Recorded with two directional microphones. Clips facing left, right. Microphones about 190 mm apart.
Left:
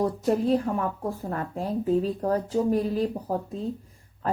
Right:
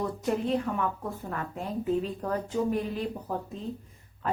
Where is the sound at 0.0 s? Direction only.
35° left (ahead or behind).